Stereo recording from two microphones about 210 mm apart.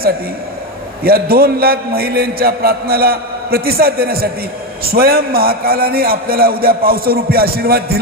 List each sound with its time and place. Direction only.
1.0 s a man's voice: 45° right (ahead or behind)